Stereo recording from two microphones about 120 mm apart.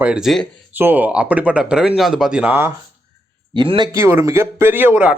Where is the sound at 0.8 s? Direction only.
15° right (ahead or behind).